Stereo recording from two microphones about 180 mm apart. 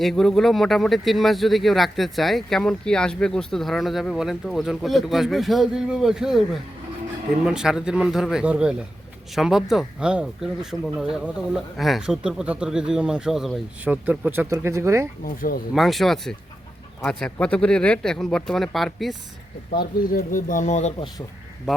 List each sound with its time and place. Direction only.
0.0 s speech: centre (ahead or behind); by 15.1 s 15° right (ahead or behind)
15.2 s speech: 55° left (ahead or behind)
15.7 s speech: centre (ahead or behind)
19.7 s speech: 60° left (ahead or behind); by 20.9 s 40° left (ahead or behind)